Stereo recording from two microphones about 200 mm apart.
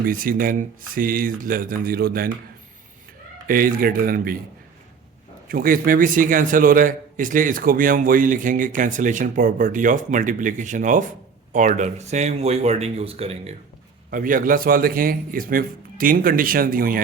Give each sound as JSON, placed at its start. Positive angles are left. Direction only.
{"t": 0.0, "sound": "a man's voice", "side_deg": -45}
{"t": 3.4, "sound": "a man's voice", "side_deg": -45}
{"t": 5.5, "sound": "a man's voice", "side_deg": -45}
{"t": 14.1, "sound": "a man's voice", "side_deg": -45}